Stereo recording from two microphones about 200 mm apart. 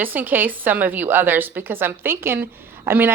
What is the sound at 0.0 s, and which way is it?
A woman's voice, 10° right (ahead or behind).